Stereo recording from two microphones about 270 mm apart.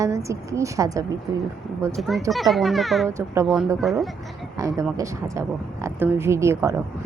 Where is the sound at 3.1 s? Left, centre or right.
Centre.